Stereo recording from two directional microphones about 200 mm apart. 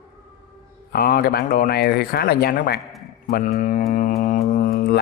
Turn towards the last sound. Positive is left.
turn(degrees=50)  # may be behind; listen again after turning